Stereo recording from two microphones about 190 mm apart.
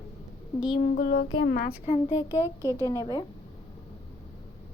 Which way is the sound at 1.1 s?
80° left.